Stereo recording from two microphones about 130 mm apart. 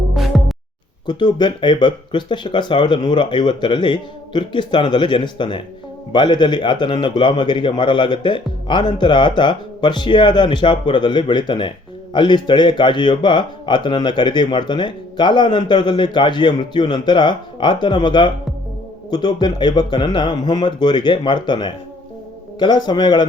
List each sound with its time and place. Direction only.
0.1 s music: centre (ahead or behind)
1.0 s speech: 35° left (ahead or behind)